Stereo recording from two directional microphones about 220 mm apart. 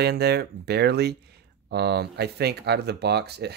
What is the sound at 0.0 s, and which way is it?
Speech, 50° right (ahead or behind).